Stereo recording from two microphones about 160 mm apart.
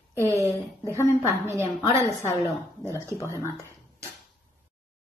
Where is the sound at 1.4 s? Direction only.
15° right (ahead or behind).